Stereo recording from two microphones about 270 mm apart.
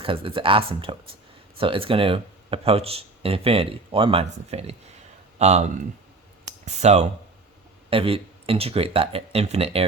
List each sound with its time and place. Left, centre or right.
0.0 s speech: centre